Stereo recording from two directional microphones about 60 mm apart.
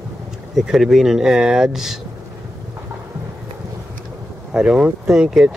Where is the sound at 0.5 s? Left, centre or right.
Centre.